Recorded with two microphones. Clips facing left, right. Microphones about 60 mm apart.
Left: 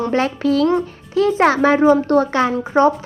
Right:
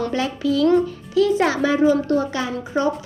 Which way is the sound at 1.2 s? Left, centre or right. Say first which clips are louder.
Left 3 dB; left.